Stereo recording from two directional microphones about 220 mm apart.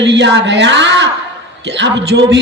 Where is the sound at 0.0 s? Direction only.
55° right (ahead or behind).